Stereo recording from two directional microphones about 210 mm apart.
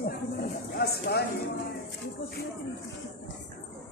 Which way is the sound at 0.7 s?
50° left (ahead or behind).